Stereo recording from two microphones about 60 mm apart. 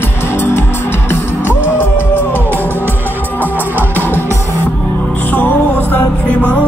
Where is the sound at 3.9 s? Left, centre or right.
Left.